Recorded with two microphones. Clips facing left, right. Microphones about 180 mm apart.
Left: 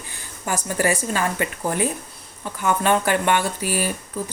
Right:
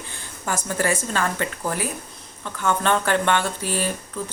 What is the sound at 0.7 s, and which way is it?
Speech, 15° left (ahead or behind).